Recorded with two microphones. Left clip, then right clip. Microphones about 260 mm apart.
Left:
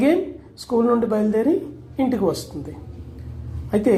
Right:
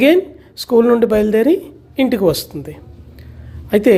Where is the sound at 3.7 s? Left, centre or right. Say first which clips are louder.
Right 7 dB; right.